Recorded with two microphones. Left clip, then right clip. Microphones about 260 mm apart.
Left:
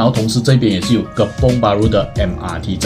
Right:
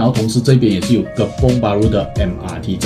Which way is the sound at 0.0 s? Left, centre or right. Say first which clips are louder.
Left 1 dB; centre.